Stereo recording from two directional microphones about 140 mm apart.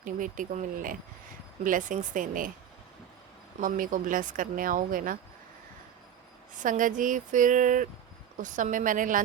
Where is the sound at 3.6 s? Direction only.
75° right (ahead or behind).